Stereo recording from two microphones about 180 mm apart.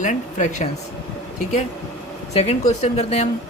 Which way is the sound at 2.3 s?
35° left (ahead or behind).